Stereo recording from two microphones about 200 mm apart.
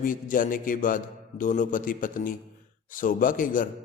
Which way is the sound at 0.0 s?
40° left (ahead or behind).